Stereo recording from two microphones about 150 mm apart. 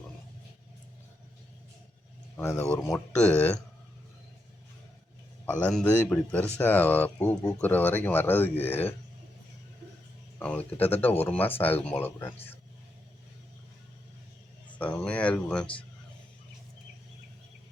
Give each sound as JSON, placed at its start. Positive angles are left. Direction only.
{"t": 2.3, "sound": "speech", "side_deg": 20}
{"t": 3.2, "sound": "speech", "side_deg": 10}
{"t": 5.5, "sound": "speech", "side_deg": 10}
{"t": 10.3, "sound": "a sound", "side_deg": 10}
{"t": 10.8, "sound": "speech", "side_deg": 15}
{"t": 14.8, "sound": "speech", "side_deg": 10}